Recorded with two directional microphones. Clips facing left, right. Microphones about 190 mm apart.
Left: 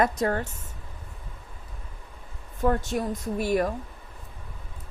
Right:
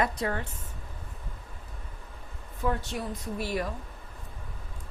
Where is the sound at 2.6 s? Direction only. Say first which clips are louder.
Left 6 dB; 45° left (ahead or behind).